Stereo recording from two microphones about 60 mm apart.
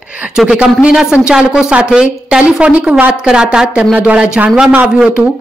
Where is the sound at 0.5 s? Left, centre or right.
Centre.